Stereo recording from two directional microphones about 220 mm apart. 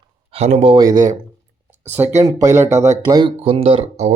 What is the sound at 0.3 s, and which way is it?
A man's voice, 30° right (ahead or behind).